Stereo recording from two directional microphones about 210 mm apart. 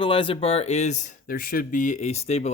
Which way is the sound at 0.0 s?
25° left (ahead or behind).